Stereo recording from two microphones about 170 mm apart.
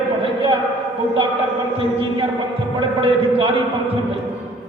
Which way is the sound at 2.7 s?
35° right (ahead or behind).